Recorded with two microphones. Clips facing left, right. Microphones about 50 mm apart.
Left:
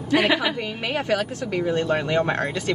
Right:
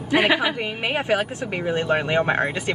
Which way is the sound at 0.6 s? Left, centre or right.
Right.